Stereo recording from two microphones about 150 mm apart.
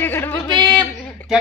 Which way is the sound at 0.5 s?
30° right (ahead or behind).